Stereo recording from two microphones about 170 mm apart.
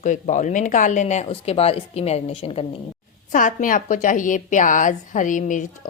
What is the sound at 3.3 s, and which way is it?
Speech, 50° left (ahead or behind).